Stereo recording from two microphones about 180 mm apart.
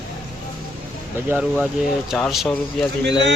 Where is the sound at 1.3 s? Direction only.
10° right (ahead or behind).